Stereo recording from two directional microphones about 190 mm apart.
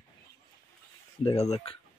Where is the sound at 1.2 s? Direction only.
35° left (ahead or behind).